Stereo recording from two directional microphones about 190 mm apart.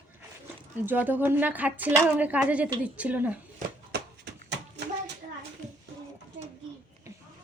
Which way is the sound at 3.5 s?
55° right (ahead or behind).